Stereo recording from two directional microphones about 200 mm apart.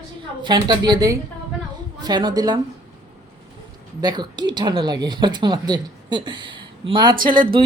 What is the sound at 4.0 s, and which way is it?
A woman's voice, 20° right (ahead or behind).